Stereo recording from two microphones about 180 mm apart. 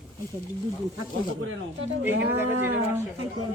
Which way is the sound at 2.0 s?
10° right (ahead or behind).